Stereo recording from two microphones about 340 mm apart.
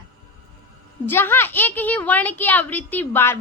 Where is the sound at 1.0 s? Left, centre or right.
Centre.